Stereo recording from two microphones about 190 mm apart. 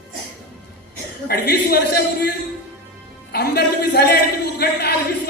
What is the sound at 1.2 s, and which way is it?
A man's voice, 55° left (ahead or behind).